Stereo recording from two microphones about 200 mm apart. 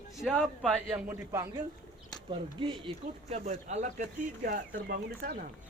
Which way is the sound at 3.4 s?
40° right (ahead or behind).